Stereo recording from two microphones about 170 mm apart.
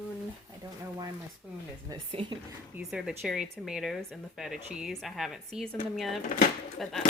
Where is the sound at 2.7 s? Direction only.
5° right (ahead or behind).